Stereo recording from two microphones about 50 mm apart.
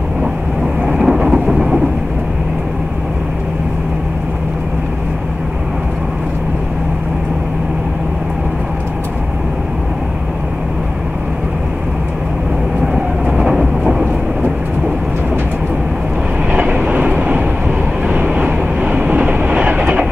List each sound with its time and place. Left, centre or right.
0.8 s vehicle: centre
12.8 s train: centre
16.5 s train: right
17.6 s vehicle: centre
18.9 s train: right